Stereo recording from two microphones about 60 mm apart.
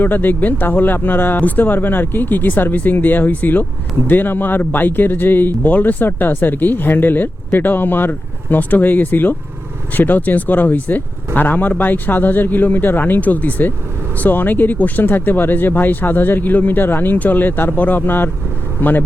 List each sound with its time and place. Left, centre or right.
0.0 s speech: left